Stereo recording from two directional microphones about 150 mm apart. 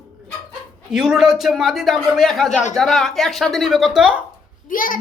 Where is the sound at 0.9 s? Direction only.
5° right (ahead or behind).